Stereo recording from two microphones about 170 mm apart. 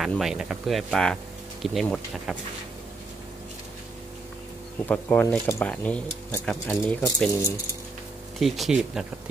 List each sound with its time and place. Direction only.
0.0 s speech: centre (ahead or behind)
4.8 s speech: 10° left (ahead or behind)
8.4 s speech: centre (ahead or behind)